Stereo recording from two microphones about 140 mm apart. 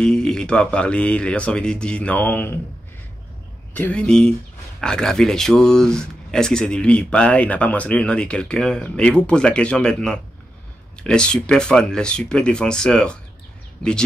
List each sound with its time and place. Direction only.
0.0 s speech: 5° left (ahead or behind)
3.7 s speech: 10° left (ahead or behind)